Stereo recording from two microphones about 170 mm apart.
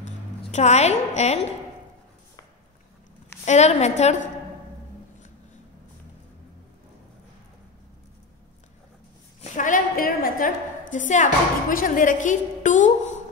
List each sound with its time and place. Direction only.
0.0 s a sound: 40° left (ahead or behind)
3.4 s a woman's voice: 40° left (ahead or behind)
9.4 s a woman's voice: 50° left (ahead or behind)